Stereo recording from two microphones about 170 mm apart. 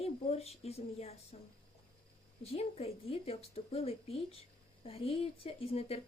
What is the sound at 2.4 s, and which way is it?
Speech, 35° left (ahead or behind).